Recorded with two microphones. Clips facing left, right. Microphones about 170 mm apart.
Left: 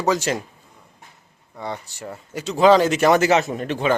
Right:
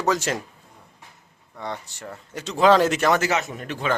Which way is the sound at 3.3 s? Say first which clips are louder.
Left 7 dB; 30° left (ahead or behind).